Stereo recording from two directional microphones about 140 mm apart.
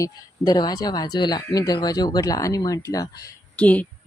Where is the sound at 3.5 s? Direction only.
10° left (ahead or behind).